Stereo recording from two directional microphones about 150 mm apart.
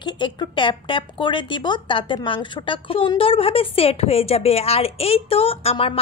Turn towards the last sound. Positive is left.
turn(degrees=40)  # may be behind; listen again after turning